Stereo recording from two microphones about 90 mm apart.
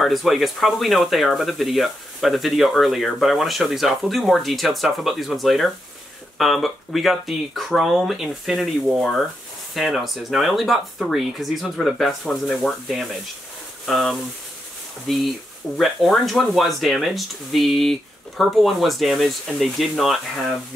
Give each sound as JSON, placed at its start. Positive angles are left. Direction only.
{"t": 0.0, "sound": "speech", "side_deg": 0}
{"t": 9.8, "sound": "speech", "side_deg": 0}